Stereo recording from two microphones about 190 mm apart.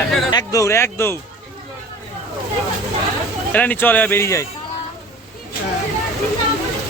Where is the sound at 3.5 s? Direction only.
10° left (ahead or behind).